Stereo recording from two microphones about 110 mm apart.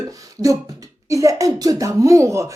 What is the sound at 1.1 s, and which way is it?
Speech, 30° right (ahead or behind).